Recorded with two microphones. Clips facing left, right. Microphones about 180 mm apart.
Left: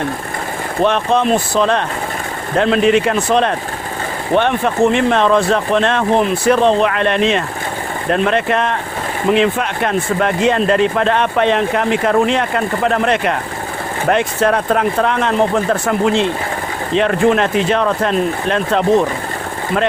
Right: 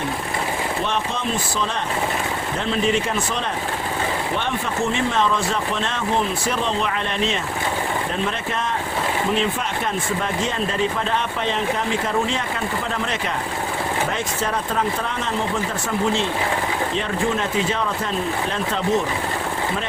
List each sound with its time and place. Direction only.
0.9 s speech: 65° left (ahead or behind)